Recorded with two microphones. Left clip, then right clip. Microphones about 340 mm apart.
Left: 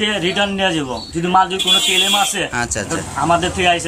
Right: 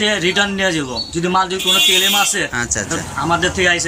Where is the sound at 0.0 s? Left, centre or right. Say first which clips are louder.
Right 2 dB; centre.